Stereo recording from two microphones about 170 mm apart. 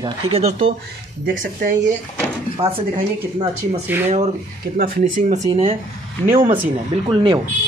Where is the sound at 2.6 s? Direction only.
35° right (ahead or behind).